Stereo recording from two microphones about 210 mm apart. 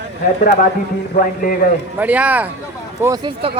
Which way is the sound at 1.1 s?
40° left (ahead or behind).